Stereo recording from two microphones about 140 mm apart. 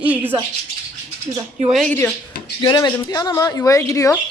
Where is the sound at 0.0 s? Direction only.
10° right (ahead or behind).